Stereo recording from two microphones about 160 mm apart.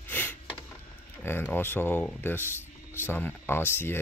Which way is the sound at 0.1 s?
10° left (ahead or behind).